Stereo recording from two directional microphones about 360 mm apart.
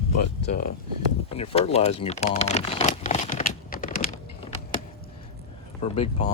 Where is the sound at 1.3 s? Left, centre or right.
Centre.